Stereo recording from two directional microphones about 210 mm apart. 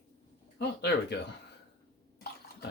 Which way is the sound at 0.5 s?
50° left (ahead or behind).